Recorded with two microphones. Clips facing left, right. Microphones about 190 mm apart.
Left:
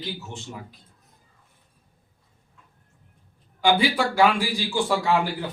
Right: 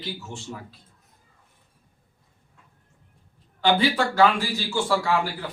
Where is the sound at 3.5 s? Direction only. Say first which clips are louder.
Even; 10° left (ahead or behind).